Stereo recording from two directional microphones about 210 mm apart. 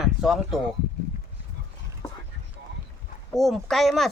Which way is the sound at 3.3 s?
Centre (ahead or behind).